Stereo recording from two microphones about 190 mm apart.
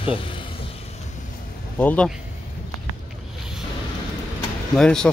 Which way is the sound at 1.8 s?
10° left (ahead or behind).